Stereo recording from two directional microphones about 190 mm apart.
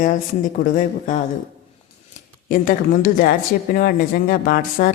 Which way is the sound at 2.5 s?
45° left (ahead or behind).